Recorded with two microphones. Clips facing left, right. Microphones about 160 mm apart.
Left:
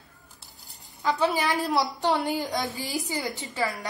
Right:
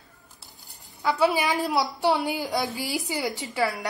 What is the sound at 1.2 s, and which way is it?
A woman's voice, 15° right (ahead or behind).